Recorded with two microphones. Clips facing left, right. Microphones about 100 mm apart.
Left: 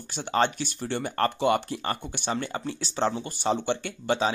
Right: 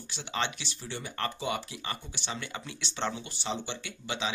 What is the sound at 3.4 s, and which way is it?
Speech, 55° left (ahead or behind).